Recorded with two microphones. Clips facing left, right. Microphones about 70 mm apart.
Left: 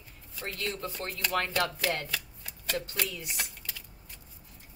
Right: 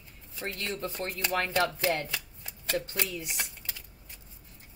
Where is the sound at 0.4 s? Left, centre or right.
Right.